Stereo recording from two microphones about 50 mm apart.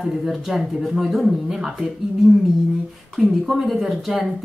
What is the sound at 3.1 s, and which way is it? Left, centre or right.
Speech, centre.